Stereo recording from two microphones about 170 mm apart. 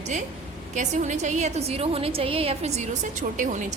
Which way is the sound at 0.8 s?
45° right (ahead or behind).